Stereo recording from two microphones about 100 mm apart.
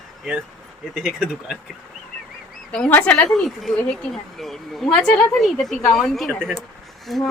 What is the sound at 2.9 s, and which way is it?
Speech, 15° left (ahead or behind).